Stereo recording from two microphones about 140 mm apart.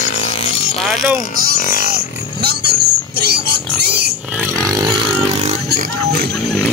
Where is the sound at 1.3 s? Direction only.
90° right.